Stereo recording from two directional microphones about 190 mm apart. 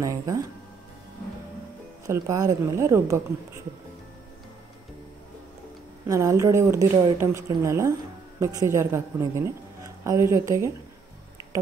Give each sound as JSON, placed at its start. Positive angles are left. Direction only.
{"t": 0.0, "sound": "a woman's voice", "side_deg": -15}
{"t": 2.0, "sound": "a woman's voice", "side_deg": -15}
{"t": 6.0, "sound": "a woman's voice", "side_deg": -15}